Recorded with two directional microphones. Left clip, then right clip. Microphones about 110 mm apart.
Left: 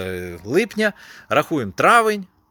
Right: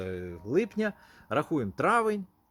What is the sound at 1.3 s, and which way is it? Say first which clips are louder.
Speech: left 10 dB; 10° left (ahead or behind).